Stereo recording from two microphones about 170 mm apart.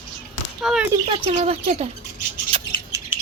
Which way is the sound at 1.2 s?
35° right (ahead or behind).